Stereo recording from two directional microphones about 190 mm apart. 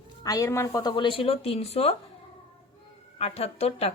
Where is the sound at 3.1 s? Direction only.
30° left (ahead or behind).